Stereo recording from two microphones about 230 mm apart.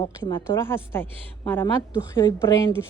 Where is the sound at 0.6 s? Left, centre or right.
Centre.